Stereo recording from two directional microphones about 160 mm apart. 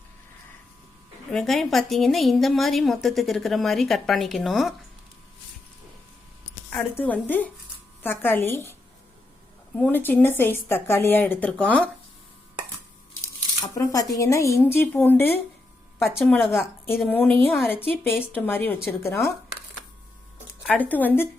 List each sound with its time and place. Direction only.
1.3 s a woman's voice: centre (ahead or behind)
6.7 s speech: 10° left (ahead or behind)
9.7 s speech: 10° left (ahead or behind)
13.7 s a woman's voice: 20° left (ahead or behind)
20.7 s speech: 10° left (ahead or behind)